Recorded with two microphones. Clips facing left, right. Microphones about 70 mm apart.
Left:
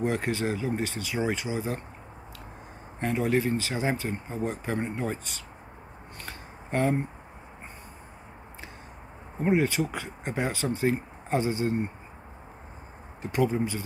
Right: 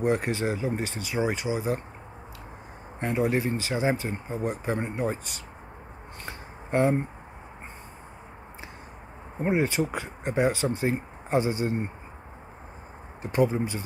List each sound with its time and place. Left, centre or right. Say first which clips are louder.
0.0 s speech: right 2 dB; right
3.0 s speech: even; centre
6.2 s shuffling cards: right 3 dB; right
9.4 s speech: even; right
13.2 s speech: right 2 dB; right